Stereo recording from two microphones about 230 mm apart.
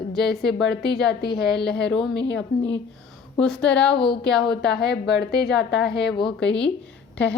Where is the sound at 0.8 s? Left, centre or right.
Left.